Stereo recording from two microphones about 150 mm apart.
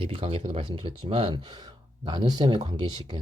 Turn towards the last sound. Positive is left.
turn(degrees=-30)  # may be behind; listen again after turning